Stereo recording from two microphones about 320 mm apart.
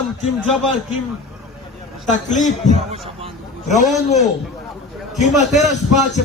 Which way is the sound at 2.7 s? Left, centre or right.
Centre.